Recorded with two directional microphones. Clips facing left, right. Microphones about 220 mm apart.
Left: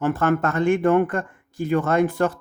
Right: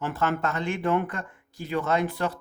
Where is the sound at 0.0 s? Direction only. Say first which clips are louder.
Left 7 dB; 50° left (ahead or behind).